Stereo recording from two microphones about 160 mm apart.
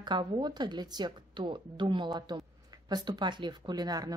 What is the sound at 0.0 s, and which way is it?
Speech, 30° right (ahead or behind).